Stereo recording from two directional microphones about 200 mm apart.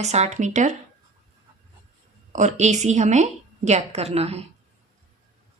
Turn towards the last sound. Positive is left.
turn(degrees=-30)  # may be behind; listen again after turning